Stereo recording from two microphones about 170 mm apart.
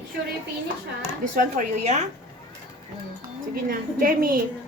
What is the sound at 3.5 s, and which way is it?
Speech, 55° right (ahead or behind).